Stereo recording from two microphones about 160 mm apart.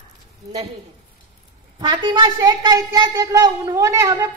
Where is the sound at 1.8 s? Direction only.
30° right (ahead or behind).